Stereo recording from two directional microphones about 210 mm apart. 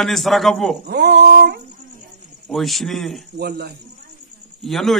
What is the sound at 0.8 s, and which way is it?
Cattle, 50° right (ahead or behind).